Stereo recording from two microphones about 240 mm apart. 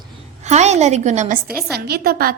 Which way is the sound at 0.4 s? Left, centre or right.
Right.